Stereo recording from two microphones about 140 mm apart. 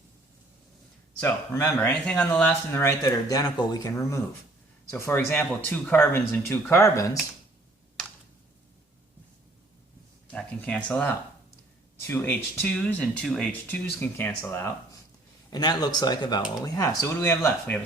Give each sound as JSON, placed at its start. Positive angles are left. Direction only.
{"t": 1.2, "sound": "speech", "side_deg": 15}
{"t": 10.3, "sound": "speech", "side_deg": 10}
{"t": 15.4, "sound": "speech", "side_deg": 30}